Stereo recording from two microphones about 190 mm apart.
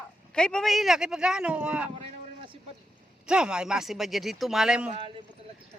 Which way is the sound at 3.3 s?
5° right (ahead or behind).